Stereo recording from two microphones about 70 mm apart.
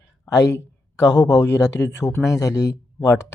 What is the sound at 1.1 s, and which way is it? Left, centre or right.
Speech, left.